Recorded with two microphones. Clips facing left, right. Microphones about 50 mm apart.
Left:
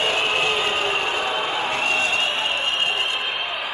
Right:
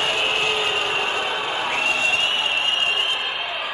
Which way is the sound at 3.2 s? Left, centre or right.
Left.